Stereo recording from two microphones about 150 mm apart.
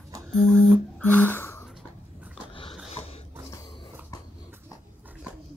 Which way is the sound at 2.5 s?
35° left (ahead or behind).